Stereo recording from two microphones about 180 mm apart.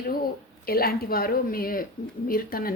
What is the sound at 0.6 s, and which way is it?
A woman's voice, 55° left (ahead or behind).